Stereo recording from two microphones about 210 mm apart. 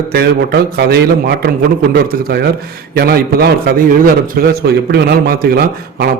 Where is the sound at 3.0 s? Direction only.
45° right (ahead or behind).